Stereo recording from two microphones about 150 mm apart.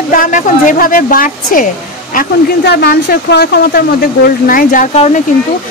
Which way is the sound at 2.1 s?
80° left.